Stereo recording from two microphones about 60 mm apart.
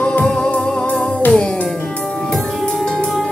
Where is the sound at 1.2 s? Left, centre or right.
Left.